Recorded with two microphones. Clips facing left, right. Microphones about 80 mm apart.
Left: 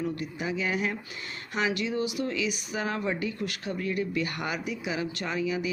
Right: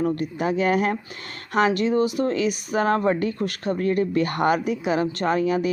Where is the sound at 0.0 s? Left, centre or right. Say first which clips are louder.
Right 8 dB; right.